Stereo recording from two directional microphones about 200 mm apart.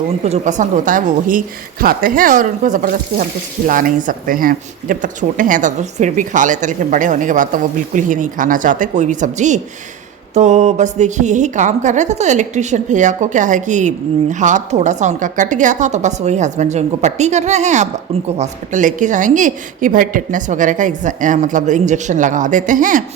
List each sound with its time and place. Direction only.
0.3 s a woman's voice: 35° right (ahead or behind)